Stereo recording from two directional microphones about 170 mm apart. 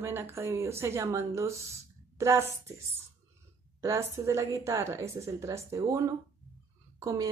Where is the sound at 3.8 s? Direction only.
15° right (ahead or behind).